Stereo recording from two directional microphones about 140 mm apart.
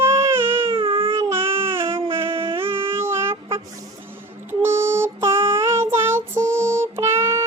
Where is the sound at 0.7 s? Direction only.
40° right (ahead or behind).